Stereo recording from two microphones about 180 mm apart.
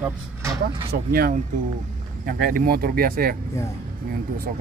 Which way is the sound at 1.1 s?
55° right (ahead or behind).